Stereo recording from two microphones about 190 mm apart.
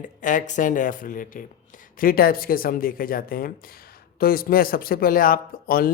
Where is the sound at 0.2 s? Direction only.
40° left (ahead or behind).